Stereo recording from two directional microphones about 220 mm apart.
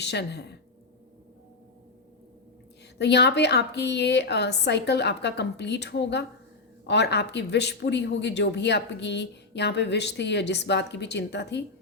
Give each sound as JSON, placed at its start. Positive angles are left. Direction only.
{"t": 0.0, "sound": "speech", "side_deg": 50}
{"t": 3.0, "sound": "speech", "side_deg": 50}